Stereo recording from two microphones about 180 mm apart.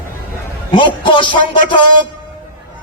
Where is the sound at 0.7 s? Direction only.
25° left (ahead or behind).